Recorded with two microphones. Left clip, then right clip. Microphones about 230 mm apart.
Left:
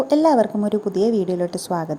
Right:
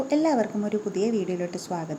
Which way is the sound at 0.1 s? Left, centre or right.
Centre.